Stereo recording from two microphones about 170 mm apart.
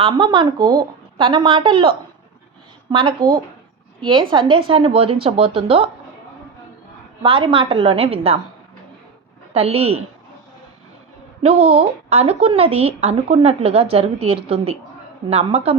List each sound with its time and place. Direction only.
0.0 s a woman's voice: 30° right (ahead or behind)
2.9 s a woman's voice: 30° right (ahead or behind)
3.2 s speech: 55° right (ahead or behind)
4.0 s speech: 30° right (ahead or behind)
7.2 s speech: 30° right (ahead or behind)
9.5 s speech: 35° right (ahead or behind)
11.4 s speech: 40° right (ahead or behind)